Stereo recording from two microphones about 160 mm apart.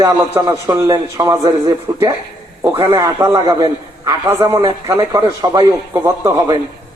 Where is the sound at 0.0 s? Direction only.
15° right (ahead or behind).